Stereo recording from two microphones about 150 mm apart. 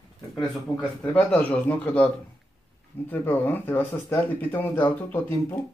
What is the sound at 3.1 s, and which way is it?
Speech, 15° left (ahead or behind).